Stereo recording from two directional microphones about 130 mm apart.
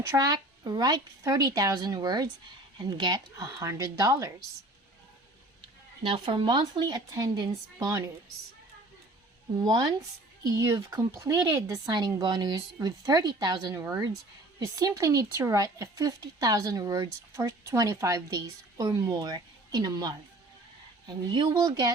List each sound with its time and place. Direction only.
0.1 s speech: 30° right (ahead or behind)
6.0 s speech: 40° right (ahead or behind); by 8.1 s 25° right (ahead or behind)
10.4 s speech: 25° right (ahead or behind)
21.2 s speech: 35° right (ahead or behind)